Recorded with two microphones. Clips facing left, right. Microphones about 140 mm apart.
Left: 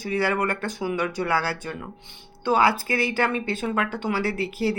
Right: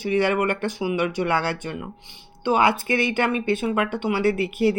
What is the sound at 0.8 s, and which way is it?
Speech, 15° right (ahead or behind).